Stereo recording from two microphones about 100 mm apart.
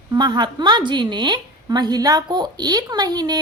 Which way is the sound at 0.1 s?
45° right (ahead or behind).